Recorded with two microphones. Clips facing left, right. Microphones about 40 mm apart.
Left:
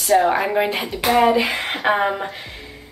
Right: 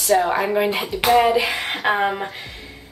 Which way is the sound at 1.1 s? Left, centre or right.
Left.